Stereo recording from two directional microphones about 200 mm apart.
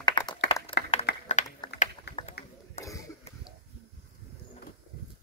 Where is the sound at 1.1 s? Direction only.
55° left (ahead or behind).